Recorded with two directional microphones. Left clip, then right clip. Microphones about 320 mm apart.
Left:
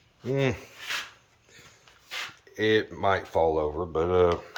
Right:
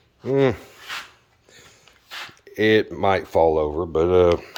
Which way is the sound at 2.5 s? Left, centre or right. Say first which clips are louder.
Right 6 dB; right.